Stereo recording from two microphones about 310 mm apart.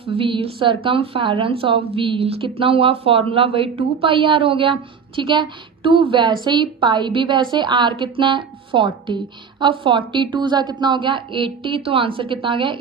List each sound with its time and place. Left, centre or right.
0.0 s speech: centre